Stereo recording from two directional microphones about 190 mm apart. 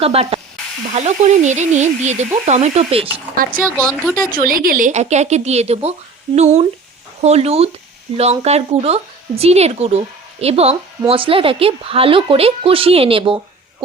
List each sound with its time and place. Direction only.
0.0 s speech: 30° right (ahead or behind)
3.4 s a woman's voice: 50° right (ahead or behind); by 13.4 s 30° right (ahead or behind)